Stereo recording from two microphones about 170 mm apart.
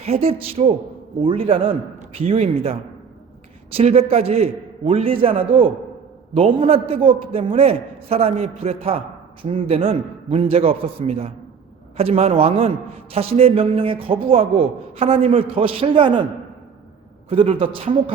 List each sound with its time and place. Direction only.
0.0 s a man's voice: 35° right (ahead or behind)
17.2 s a man's voice: 35° right (ahead or behind)